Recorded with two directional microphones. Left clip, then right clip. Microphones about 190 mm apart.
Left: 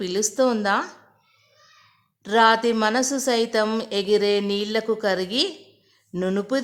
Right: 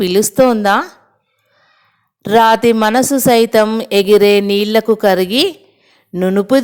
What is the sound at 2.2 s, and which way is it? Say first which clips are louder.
A woman's voice: right 8 dB; 40° right (ahead or behind).